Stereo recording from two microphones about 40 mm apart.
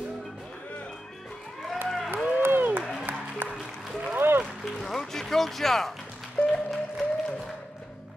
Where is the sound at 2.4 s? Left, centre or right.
Right.